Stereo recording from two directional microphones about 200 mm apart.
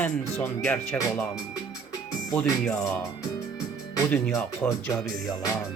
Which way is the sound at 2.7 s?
15° left (ahead or behind).